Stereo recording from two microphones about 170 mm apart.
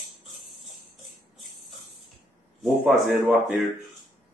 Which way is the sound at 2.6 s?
Centre (ahead or behind).